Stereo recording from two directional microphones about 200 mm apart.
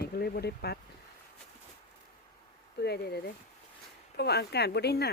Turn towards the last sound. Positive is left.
turn(degrees=55)  # may be behind; listen again after turning